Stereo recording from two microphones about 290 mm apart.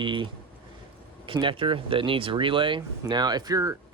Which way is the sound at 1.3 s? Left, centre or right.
Centre.